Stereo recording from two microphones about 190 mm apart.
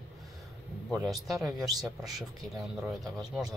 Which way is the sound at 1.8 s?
Centre (ahead or behind).